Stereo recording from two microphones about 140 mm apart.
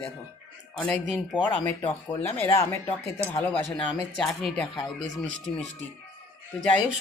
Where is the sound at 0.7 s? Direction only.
10° left (ahead or behind).